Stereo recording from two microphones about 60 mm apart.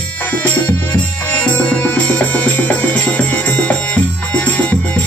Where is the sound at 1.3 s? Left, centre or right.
Left.